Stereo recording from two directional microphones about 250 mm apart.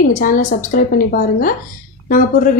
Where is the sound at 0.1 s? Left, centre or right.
Left.